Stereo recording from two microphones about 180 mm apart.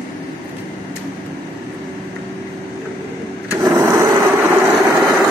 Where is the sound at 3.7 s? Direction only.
15° right (ahead or behind).